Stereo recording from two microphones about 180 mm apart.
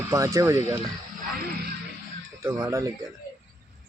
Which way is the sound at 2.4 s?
15° right (ahead or behind).